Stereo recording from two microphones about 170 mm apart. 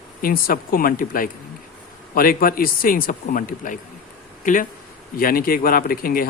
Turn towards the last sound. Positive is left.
turn(degrees=60)  # may be behind; listen again after turning